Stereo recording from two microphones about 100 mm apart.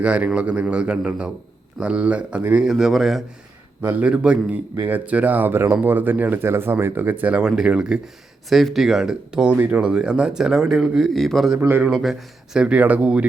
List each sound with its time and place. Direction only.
0.0 s a man's voice: 10° right (ahead or behind)
3.8 s a man's voice: 15° right (ahead or behind)